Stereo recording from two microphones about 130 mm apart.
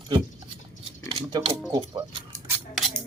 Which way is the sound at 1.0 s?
40° right (ahead or behind).